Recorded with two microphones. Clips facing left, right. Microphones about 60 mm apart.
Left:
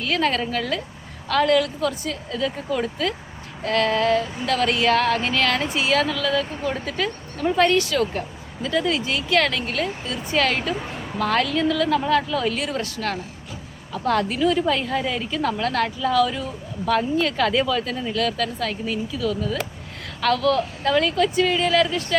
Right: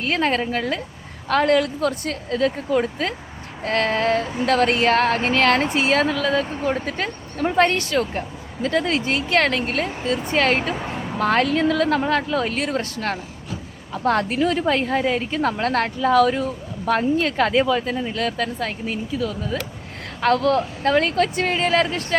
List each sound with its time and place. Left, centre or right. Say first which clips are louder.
0.0 s a woman's voice: right 1 dB; right
2.7 s a woman's voice: right 3 dB; right
11.2 s a woman's voice: right 2 dB; right